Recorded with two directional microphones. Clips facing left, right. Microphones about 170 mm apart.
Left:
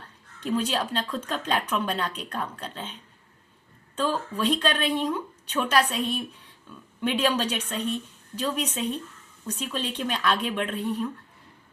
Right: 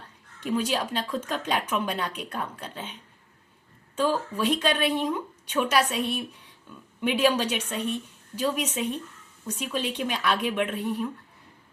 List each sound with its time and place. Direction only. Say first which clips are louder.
0.3 s speech: even; 10° right (ahead or behind)
3.9 s speech: right 2 dB; 10° right (ahead or behind)